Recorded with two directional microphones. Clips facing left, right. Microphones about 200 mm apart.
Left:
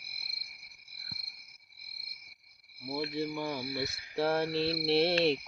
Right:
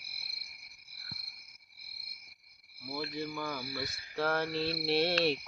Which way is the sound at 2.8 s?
25° left (ahead or behind).